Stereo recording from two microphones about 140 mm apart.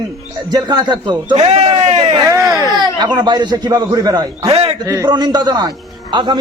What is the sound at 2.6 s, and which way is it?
A man's voice, 30° right (ahead or behind).